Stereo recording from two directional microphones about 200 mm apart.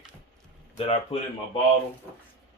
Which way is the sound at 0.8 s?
30° left (ahead or behind).